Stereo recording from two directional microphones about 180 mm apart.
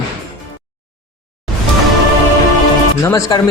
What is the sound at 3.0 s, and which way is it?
Speech, 15° left (ahead or behind).